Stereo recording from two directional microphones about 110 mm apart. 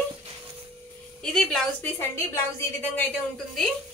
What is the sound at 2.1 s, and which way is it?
Speech, 25° left (ahead or behind).